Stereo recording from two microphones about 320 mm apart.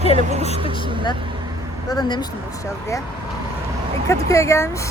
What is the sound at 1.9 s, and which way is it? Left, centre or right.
Speech, centre.